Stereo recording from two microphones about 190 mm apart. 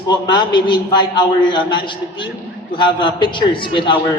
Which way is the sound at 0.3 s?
25° left (ahead or behind).